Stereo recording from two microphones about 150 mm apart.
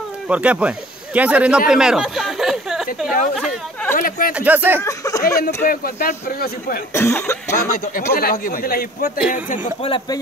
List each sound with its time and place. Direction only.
0.3 s speech: 10° right (ahead or behind)
3.9 s speech: 70° left (ahead or behind)
4.3 s speech: 10° right (ahead or behind)
4.8 s cough: 20° left (ahead or behind)
5.6 s a man's voice: 75° left (ahead or behind)
6.9 s cough: 15° left (ahead or behind)
8.1 s a man's voice: 75° left (ahead or behind)
9.8 s speech: 30° left (ahead or behind)